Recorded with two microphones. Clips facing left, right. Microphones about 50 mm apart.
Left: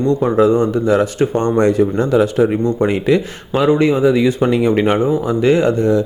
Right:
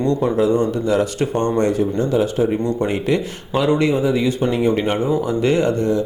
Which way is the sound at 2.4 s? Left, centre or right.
Left.